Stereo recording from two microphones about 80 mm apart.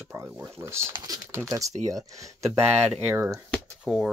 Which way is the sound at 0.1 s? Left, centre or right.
Right.